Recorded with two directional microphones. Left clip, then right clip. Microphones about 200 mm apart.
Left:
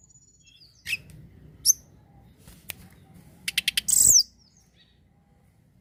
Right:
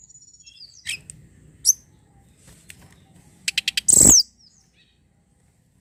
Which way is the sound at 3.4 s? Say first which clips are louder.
Right 3 dB; 15° right (ahead or behind).